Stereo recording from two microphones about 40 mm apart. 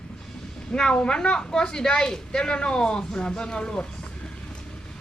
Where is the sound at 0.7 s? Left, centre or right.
Left.